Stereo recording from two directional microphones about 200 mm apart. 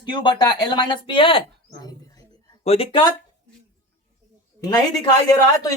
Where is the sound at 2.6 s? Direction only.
30° left (ahead or behind).